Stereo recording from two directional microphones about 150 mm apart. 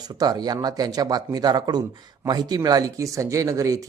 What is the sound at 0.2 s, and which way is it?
Speech, 25° right (ahead or behind).